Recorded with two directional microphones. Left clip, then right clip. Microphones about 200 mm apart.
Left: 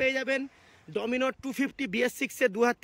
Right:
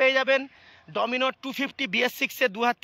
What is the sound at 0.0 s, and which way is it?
Speech, 5° left (ahead or behind).